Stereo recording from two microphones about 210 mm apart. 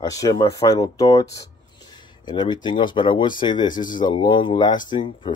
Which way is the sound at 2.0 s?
20° left (ahead or behind).